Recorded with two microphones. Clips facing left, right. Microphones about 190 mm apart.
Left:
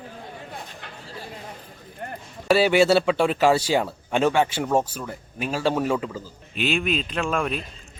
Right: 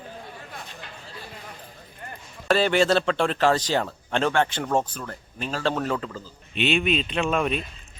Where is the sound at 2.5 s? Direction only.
10° left (ahead or behind).